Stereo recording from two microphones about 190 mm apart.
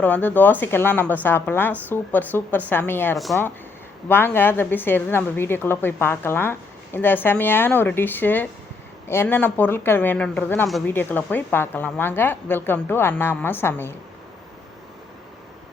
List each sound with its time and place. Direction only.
0.0 s a woman's voice: 10° left (ahead or behind)